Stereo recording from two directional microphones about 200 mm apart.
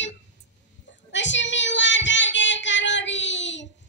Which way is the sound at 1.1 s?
65° left (ahead or behind).